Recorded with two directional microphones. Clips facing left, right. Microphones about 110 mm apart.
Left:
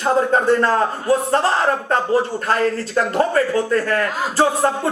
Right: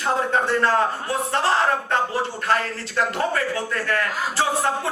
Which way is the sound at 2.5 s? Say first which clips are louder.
Left 5 dB; 40° left (ahead or behind).